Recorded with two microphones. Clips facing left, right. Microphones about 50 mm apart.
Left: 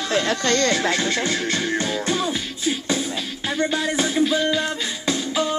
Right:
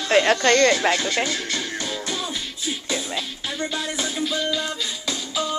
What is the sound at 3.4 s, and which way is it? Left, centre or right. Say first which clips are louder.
Music: left 8 dB; left.